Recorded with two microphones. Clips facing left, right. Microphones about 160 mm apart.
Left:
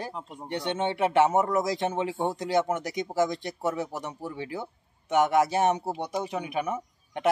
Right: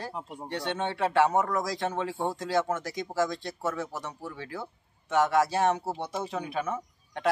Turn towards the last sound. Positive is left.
turn(degrees=15)  # may be behind; listen again after turning